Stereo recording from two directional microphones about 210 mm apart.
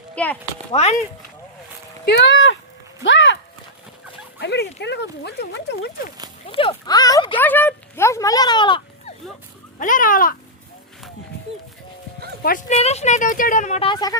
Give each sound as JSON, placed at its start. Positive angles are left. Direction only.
{"t": 0.2, "sound": "a child's voice", "side_deg": 5}
{"t": 0.7, "sound": "speech", "side_deg": 30}
{"t": 2.0, "sound": "speech", "side_deg": 55}
{"t": 4.4, "sound": "speech", "side_deg": 55}
{"t": 6.4, "sound": "speech", "side_deg": 25}
{"t": 7.3, "sound": "speech", "side_deg": 10}
{"t": 9.7, "sound": "speech", "side_deg": 40}
{"t": 12.4, "sound": "speech", "side_deg": 40}